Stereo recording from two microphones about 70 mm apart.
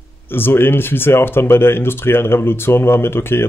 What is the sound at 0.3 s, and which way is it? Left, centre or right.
Speech, left.